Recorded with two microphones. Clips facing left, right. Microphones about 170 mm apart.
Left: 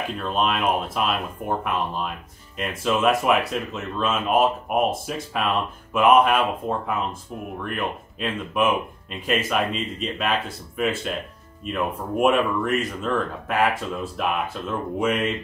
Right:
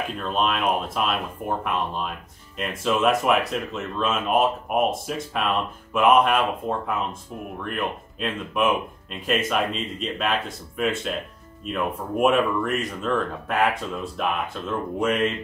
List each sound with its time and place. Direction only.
0.2 s speech: centre (ahead or behind)